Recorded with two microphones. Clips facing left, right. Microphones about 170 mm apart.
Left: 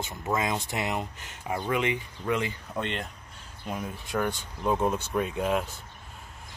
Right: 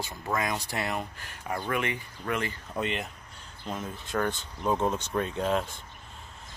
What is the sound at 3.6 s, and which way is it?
Speech, 10° left (ahead or behind).